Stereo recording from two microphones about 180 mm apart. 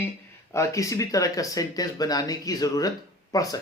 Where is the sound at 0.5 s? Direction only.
15° left (ahead or behind).